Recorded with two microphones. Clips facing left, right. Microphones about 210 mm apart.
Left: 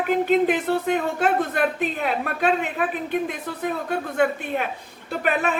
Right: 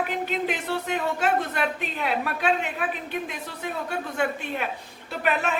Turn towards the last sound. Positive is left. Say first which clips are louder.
# left 3 dB
turn(degrees=45)  # may be behind; listen again after turning